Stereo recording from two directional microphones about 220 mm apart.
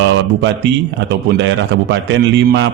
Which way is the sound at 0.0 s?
55° right (ahead or behind).